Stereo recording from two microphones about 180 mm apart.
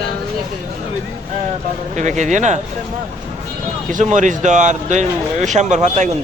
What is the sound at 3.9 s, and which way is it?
Speech, 45° right (ahead or behind).